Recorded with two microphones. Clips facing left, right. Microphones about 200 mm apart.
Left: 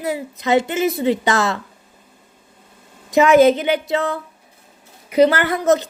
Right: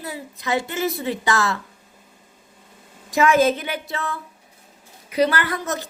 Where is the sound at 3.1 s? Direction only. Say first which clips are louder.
Left 6 dB; 20° left (ahead or behind).